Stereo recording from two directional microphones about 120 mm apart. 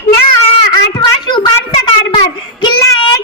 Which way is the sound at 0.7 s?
35° left (ahead or behind).